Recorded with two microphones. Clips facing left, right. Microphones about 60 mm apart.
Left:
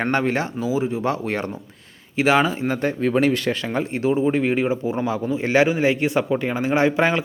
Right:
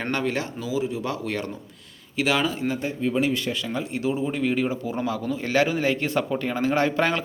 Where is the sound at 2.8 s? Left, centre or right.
Left.